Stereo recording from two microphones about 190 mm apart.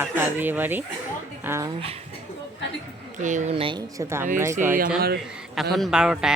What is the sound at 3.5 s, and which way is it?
Speech, 25° right (ahead or behind).